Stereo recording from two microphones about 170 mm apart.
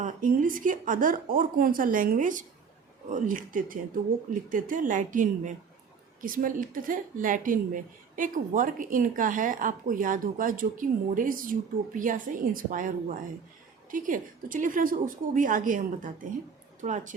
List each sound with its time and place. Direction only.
0.0 s a woman's voice: 50° right (ahead or behind)